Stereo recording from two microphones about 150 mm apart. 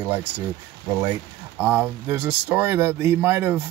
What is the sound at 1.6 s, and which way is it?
Speech, 10° right (ahead or behind).